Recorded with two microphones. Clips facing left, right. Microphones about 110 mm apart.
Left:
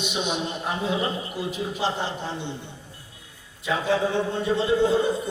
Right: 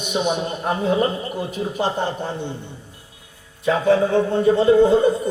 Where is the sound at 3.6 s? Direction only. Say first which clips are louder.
Right 7 dB; 50° right (ahead or behind).